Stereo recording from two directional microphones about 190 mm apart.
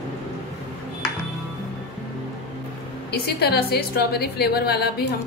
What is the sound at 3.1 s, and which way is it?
A woman's voice, 55° left (ahead or behind).